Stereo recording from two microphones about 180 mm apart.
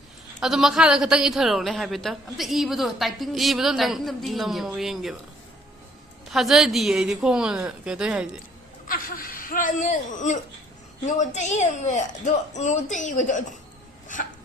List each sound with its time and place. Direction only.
0.3 s a woman's voice: centre (ahead or behind)
6.3 s a woman's voice: centre (ahead or behind)
8.9 s laughter: 50° left (ahead or behind)
11.0 s a woman's voice: 40° left (ahead or behind)
14.1 s a sound: 45° left (ahead or behind)